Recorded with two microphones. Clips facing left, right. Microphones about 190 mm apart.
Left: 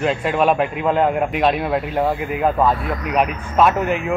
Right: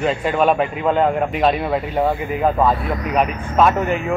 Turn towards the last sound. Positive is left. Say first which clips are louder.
# even
turn(degrees=0)  # may be behind; listen again after turning